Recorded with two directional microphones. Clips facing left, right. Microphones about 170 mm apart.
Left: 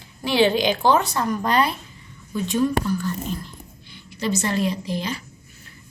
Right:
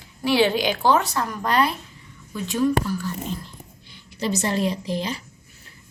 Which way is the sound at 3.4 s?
40° right (ahead or behind).